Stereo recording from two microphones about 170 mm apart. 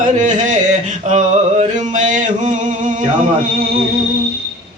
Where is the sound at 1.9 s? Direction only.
45° right (ahead or behind).